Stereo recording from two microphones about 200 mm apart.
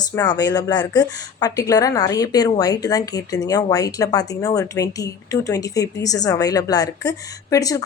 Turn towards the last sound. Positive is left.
turn(degrees=15)  # may be behind; listen again after turning